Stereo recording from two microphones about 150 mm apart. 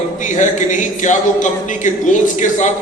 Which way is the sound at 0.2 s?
55° left (ahead or behind).